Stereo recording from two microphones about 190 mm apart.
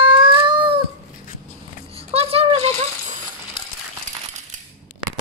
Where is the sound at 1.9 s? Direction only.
30° right (ahead or behind).